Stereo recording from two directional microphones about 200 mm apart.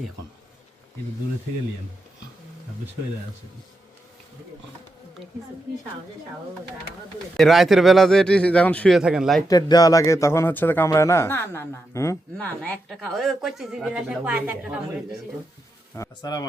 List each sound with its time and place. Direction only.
7.3 s a man's voice: centre (ahead or behind)
9.5 s a man's voice: 20° left (ahead or behind); by 14.8 s 10° right (ahead or behind)
16.0 s speech: 20° left (ahead or behind)